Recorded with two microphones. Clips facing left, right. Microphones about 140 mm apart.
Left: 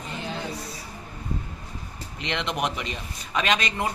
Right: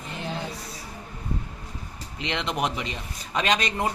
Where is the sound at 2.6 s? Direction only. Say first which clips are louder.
Right 1 dB; 30° right (ahead or behind).